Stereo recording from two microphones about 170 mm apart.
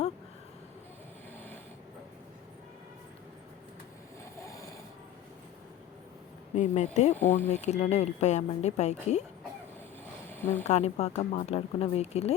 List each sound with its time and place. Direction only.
4.4 s a sound: 15° left (ahead or behind)
6.6 s speech: 45° left (ahead or behind)
7.2 s speech: 10° left (ahead or behind)
7.5 s speech: 40° left (ahead or behind)
10.2 s a sound: 10° left (ahead or behind)
10.7 s speech: 40° left (ahead or behind)